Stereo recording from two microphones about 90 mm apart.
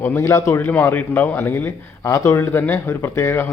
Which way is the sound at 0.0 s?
25° left (ahead or behind).